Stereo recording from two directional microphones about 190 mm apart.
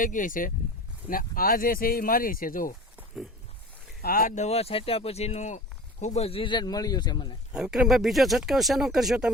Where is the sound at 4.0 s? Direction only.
50° left (ahead or behind); by 7.3 s 25° left (ahead or behind).